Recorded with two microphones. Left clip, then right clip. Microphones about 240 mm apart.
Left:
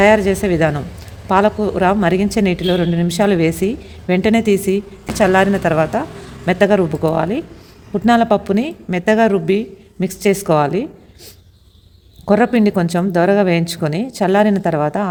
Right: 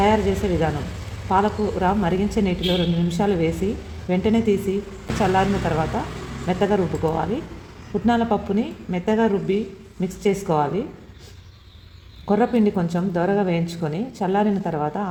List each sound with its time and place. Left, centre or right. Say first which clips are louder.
0.0 s speech: left 7 dB; left
12.2 s speech: left 6 dB; left